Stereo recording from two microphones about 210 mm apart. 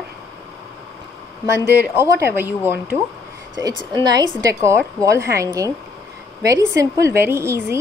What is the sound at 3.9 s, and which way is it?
A woman's voice, 20° right (ahead or behind).